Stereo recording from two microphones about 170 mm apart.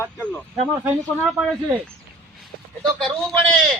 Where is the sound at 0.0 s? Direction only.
10° left (ahead or behind).